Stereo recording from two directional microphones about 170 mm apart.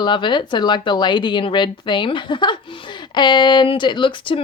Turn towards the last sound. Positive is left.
turn(degrees=30)  # may be behind; listen again after turning